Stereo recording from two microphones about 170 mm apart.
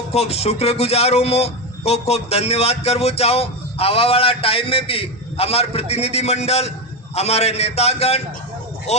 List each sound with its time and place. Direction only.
0.1 s a man's voice: 40° left (ahead or behind)